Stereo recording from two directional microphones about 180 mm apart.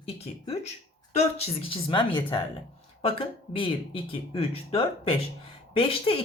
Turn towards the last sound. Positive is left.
turn(degrees=30)  # may be behind; listen again after turning